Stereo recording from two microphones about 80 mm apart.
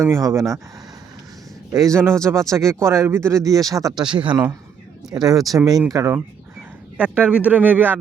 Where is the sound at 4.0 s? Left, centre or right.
Right.